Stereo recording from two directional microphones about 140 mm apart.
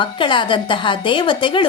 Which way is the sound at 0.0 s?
35° left (ahead or behind).